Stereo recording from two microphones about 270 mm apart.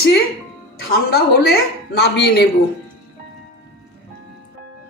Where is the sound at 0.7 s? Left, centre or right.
Left.